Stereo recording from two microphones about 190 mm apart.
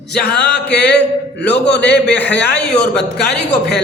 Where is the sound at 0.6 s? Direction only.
65° left (ahead or behind).